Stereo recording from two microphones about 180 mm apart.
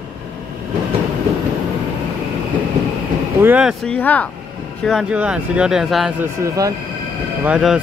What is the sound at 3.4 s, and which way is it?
Speech, 10° right (ahead or behind).